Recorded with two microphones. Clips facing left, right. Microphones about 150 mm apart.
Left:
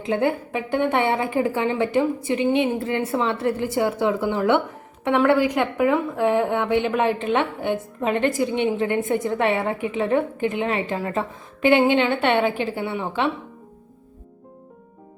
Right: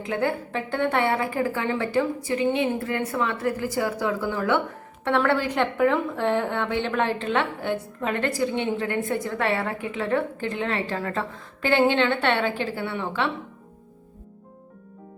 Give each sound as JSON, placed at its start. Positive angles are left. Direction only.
{"t": 0.0, "sound": "a woman's voice", "side_deg": 20}